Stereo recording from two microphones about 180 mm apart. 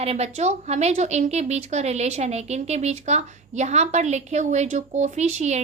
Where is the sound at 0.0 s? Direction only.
35° right (ahead or behind).